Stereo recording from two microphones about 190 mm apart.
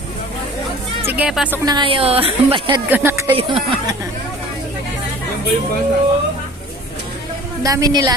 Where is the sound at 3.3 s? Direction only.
25° right (ahead or behind).